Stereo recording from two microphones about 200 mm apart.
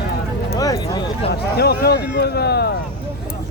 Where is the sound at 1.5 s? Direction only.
55° left (ahead or behind).